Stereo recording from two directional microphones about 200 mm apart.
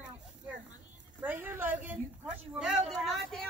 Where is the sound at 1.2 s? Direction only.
10° right (ahead or behind).